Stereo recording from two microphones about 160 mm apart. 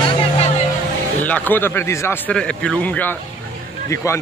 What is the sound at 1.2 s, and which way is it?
A man's voice, 10° left (ahead or behind).